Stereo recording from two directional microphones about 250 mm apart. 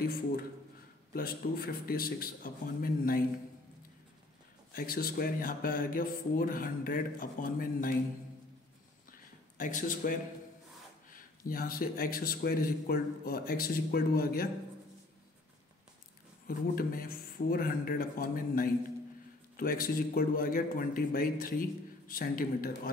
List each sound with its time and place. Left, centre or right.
0.0 s a man's voice: left
4.7 s a man's voice: left
9.6 s a man's voice: left
16.4 s a man's voice: left